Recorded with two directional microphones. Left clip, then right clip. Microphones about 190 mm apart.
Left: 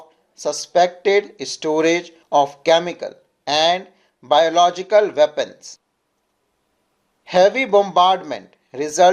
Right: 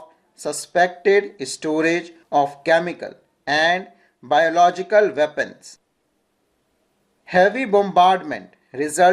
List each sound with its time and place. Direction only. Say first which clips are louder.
0.4 s speech: left 2 dB; 25° left (ahead or behind)
7.3 s speech: left 2 dB; 25° left (ahead or behind)